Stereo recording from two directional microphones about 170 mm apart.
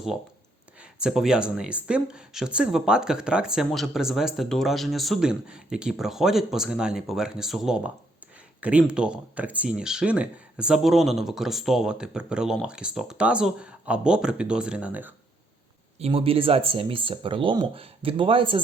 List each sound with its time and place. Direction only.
0.9 s speech: 5° right (ahead or behind)
16.0 s speech: 35° right (ahead or behind)